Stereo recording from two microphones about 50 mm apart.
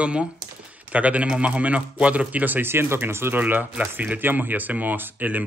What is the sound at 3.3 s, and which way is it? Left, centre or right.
Speech, right.